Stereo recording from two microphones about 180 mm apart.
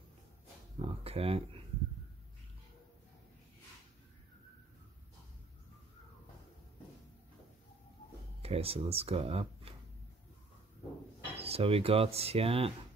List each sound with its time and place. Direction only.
0.7 s speech: 30° right (ahead or behind)
8.4 s speech: 35° right (ahead or behind)
11.3 s speech: 35° right (ahead or behind)